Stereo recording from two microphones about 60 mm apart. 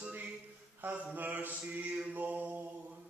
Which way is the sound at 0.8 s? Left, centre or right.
Right.